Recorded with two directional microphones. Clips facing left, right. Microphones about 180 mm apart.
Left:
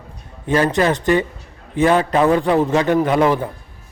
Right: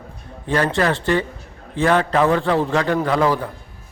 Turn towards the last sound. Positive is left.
turn(degrees=20)  # may be behind; listen again after turning